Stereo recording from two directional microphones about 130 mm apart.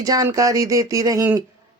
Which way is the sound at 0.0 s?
30° right (ahead or behind).